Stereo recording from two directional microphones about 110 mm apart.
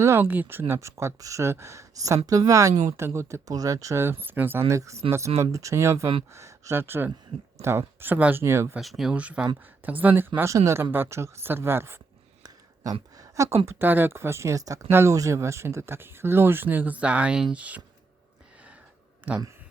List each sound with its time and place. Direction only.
0.0 s speech: 20° right (ahead or behind)
4.7 s speech: 30° right (ahead or behind)
8.8 s speech: centre (ahead or behind); by 11.9 s 20° right (ahead or behind)
12.4 s a sound: 35° right (ahead or behind)
13.7 s speech: 20° right (ahead or behind)
19.3 s speech: 10° right (ahead or behind)